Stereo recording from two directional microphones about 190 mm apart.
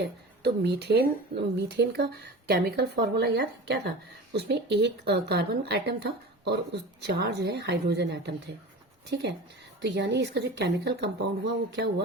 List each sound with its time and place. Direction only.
0.0 s speech: 65° right (ahead or behind)